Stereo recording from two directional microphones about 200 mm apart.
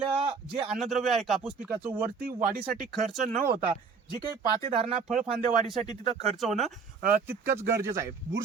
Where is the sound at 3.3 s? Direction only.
45° right (ahead or behind).